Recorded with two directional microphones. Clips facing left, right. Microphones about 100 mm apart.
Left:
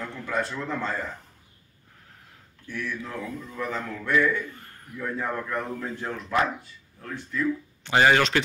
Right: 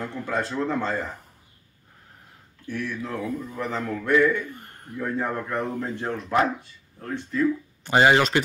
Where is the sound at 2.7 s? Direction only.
30° right (ahead or behind).